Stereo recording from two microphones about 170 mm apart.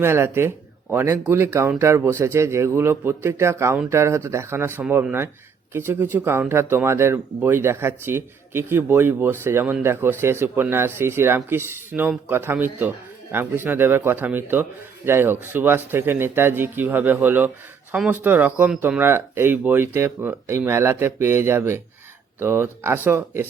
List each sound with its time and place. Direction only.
0.0 s speech: 15° right (ahead or behind)